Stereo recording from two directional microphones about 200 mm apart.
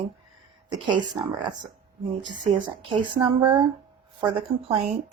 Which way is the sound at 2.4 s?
25° right (ahead or behind).